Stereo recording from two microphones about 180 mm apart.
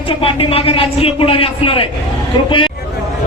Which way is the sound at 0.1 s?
30° left (ahead or behind).